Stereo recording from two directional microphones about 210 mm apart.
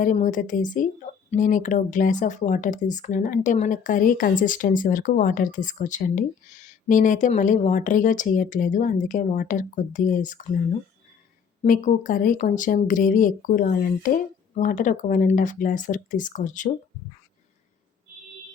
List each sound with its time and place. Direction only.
0.0 s speech: 40° left (ahead or behind)
11.6 s speech: 40° left (ahead or behind)